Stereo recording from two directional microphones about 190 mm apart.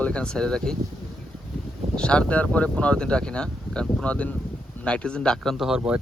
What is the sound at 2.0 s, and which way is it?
Speech, 5° left (ahead or behind).